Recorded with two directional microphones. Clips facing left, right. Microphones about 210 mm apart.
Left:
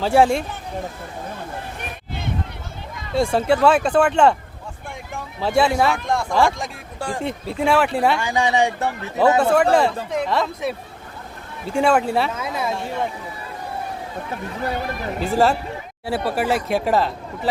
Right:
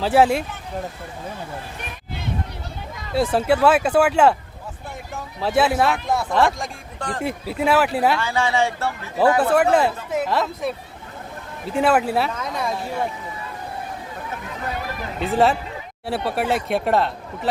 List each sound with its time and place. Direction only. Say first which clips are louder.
0.0 s speech: left 1 dB; centre (ahead or behind)
3.2 s speech: left 1 dB; 5° right (ahead or behind)
8.2 s speech: left 2 dB; 15° left (ahead or behind)
9.4 s speech: left 1 dB; 5° right (ahead or behind)
15.2 s speech: even; centre (ahead or behind)